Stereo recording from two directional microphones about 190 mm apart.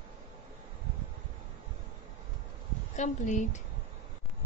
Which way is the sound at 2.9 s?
40° left (ahead or behind).